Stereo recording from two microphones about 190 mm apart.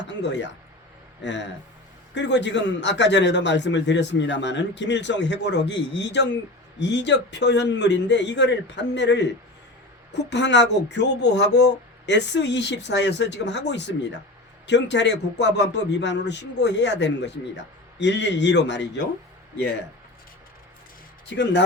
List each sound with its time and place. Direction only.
0.0 s a man's voice: 65° left (ahead or behind)
21.2 s a man's voice: 65° left (ahead or behind)